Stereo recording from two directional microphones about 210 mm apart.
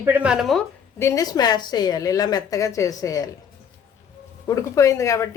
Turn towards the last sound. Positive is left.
turn(degrees=15)  # may be behind; listen again after turning